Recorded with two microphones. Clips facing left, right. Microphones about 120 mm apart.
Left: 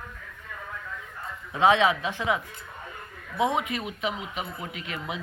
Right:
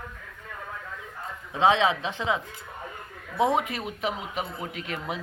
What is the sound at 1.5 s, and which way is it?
Speech, 25° right (ahead or behind).